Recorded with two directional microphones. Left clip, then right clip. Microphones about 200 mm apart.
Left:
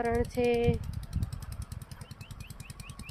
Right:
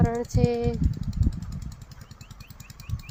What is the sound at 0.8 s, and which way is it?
Vehicle, 55° left (ahead or behind).